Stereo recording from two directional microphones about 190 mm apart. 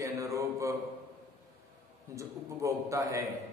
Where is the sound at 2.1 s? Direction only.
15° right (ahead or behind).